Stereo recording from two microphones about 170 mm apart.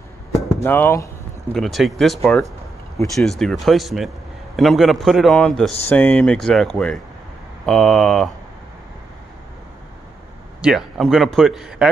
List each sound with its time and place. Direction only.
0.3 s chop: 15° left (ahead or behind)
1.5 s speech: centre (ahead or behind)
10.6 s speech: centre (ahead or behind)